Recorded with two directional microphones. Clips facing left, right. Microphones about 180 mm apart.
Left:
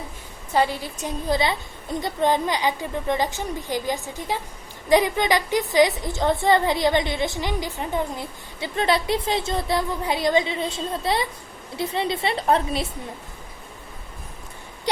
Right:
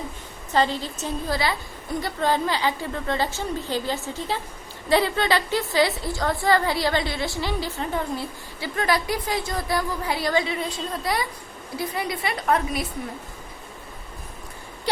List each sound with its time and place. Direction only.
0.5 s a woman's voice: 10° left (ahead or behind); by 12.9 s 30° left (ahead or behind)